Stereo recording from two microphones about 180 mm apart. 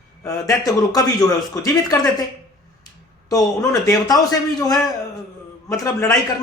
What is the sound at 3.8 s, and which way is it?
Speech, 20° left (ahead or behind).